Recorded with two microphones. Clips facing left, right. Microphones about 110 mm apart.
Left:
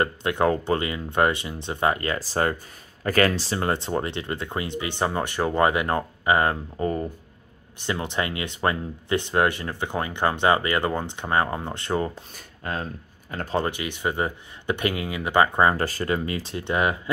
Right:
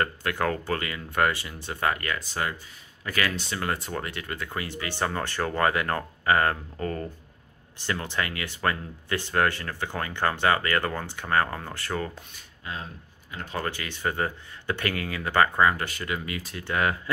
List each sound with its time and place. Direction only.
0.0 s speech: 20° left (ahead or behind)
12.4 s speech: 45° left (ahead or behind)
13.6 s speech: 20° left (ahead or behind)
15.6 s speech: 35° left (ahead or behind); by 17.1 s 20° left (ahead or behind)